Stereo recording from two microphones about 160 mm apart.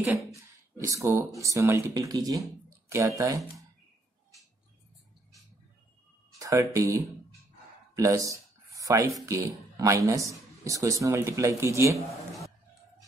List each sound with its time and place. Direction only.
0.0 s speech: 5° right (ahead or behind)
0.3 s speech: 20° right (ahead or behind)
6.4 s speech: 20° right (ahead or behind)
7.9 s a sound: 20° right (ahead or behind)
9.2 s speech: 20° right (ahead or behind)